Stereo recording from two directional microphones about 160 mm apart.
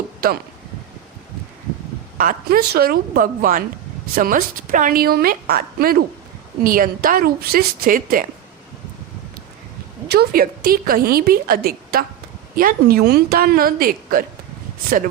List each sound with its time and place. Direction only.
0.2 s speech: 70° right (ahead or behind)
2.1 s a woman's voice: 65° right (ahead or behind)
10.1 s a woman's voice: 70° right (ahead or behind)